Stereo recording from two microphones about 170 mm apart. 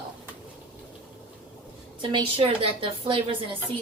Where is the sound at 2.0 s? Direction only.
30° right (ahead or behind).